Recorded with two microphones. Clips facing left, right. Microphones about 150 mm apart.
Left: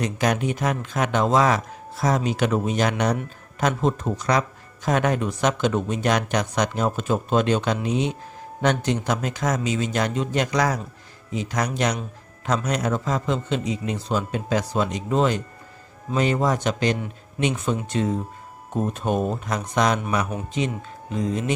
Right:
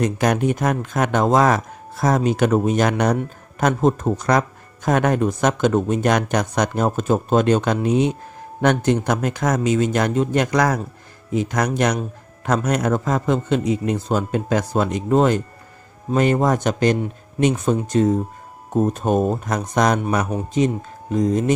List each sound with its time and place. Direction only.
0.0 s speech: 50° right (ahead or behind)